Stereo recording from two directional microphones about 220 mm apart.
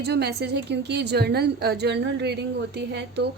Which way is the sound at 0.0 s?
50° right (ahead or behind).